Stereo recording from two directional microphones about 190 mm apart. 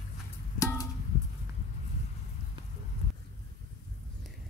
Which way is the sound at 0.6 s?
15° left (ahead or behind).